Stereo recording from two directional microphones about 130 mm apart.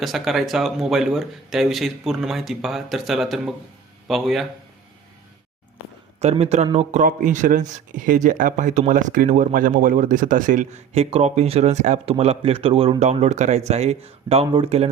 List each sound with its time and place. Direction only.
0.0 s speech: centre (ahead or behind)
6.3 s a man's voice: 55° right (ahead or behind)
6.7 s speech: 75° right (ahead or behind); by 12.9 s 45° right (ahead or behind)
13.0 s a man's voice: 60° right (ahead or behind)